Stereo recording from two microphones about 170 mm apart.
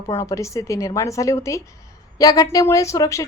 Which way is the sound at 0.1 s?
20° left (ahead or behind).